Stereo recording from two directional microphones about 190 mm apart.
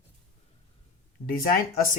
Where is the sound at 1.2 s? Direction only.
50° left (ahead or behind).